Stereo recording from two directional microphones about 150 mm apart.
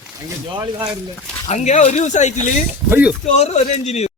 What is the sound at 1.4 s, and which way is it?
Speech, 50° left (ahead or behind).